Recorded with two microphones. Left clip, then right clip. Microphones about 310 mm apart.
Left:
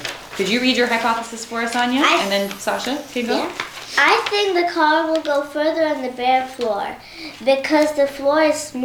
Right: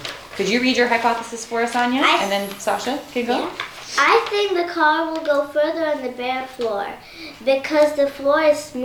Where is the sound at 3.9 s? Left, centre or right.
Left.